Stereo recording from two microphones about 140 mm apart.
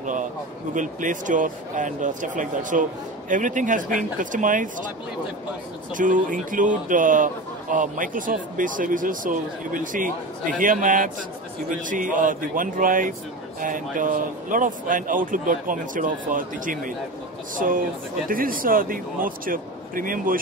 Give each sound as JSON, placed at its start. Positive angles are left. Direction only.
{"t": 0.0, "sound": "speech", "side_deg": -65}
{"t": 5.9, "sound": "speech", "side_deg": -70}
{"t": 18.3, "sound": "speech", "side_deg": -90}